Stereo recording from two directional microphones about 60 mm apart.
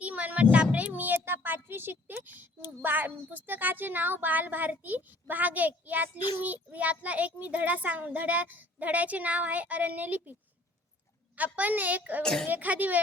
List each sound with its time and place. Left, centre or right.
0.0 s a sound: right
0.5 s speech: right
11.3 s speech: right
12.2 s speech: centre
12.5 s speech: right